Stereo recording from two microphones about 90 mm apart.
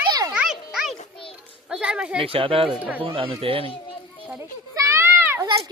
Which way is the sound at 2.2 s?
90° right.